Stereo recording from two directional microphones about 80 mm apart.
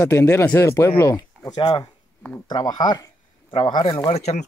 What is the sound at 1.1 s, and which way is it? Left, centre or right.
Speech, left.